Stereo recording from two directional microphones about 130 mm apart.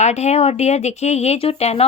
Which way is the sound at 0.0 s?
55° left (ahead or behind).